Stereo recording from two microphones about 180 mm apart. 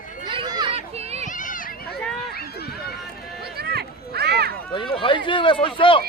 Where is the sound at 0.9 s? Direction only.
35° right (ahead or behind).